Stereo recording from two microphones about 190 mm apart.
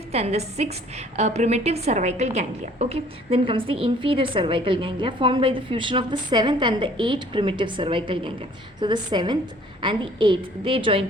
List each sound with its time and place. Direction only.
0.1 s a woman's voice: 35° right (ahead or behind)